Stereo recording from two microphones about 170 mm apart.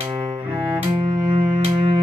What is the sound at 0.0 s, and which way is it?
Cello, 30° right (ahead or behind).